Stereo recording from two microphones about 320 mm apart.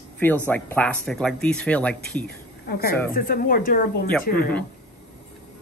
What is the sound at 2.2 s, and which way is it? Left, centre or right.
A woman's voice, left.